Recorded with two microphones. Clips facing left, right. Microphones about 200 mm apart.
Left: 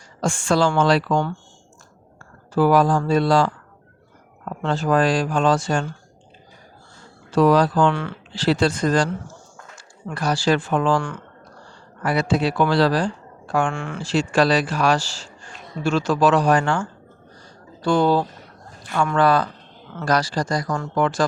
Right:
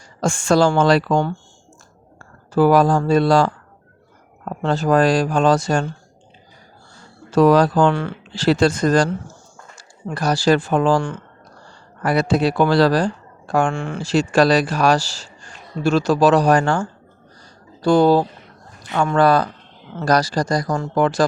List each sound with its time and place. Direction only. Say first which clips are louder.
0.2 s speech: right 4 dB; 45° right (ahead or behind)
2.5 s speech: right 3 dB; 40° right (ahead or behind)
7.3 s speech: right 3 dB; 45° right (ahead or behind)
10.2 s speech: right 3 dB; 40° right (ahead or behind)